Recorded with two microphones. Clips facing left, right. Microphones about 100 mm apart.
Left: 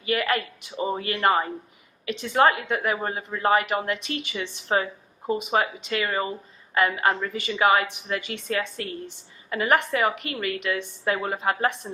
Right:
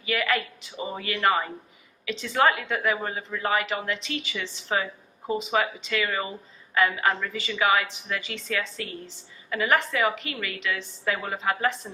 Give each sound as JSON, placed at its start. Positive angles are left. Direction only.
{"t": 0.1, "sound": "a woman's voice", "side_deg": 40}
{"t": 4.7, "sound": "a woman's voice", "side_deg": 40}
{"t": 8.4, "sound": "a woman's voice", "side_deg": 55}